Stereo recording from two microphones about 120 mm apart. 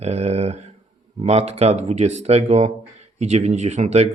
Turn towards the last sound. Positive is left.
turn(degrees=-70)  # may be behind; listen again after turning